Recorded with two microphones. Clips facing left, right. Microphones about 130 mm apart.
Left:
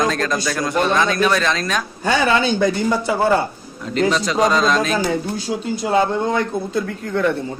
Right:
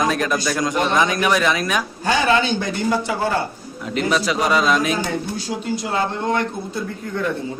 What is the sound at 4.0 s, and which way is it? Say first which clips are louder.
Speech: left 3 dB; 5° right (ahead or behind).